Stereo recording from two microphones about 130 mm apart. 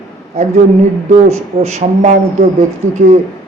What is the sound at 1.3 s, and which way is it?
Speech, 60° right (ahead or behind).